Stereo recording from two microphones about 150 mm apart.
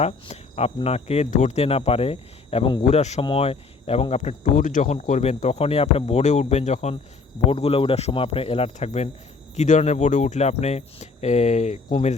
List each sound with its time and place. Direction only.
0.0 s speech: 45° left (ahead or behind)
2.8 s speech: 50° left (ahead or behind)